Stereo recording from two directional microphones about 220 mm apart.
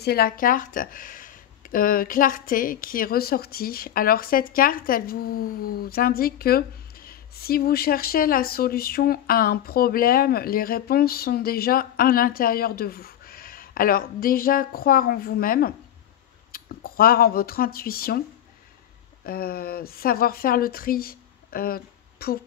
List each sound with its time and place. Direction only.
0.0 s speech: 45° left (ahead or behind)
19.2 s speech: 45° left (ahead or behind)